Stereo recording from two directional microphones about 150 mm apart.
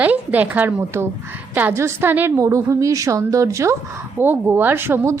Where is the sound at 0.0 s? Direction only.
10° right (ahead or behind).